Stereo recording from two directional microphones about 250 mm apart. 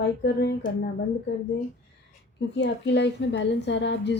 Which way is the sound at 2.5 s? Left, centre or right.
Left.